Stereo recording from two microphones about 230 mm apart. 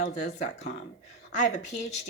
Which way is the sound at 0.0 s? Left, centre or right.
Left.